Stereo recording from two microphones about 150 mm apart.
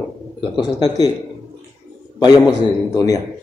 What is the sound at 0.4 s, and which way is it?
Speech, 25° left (ahead or behind).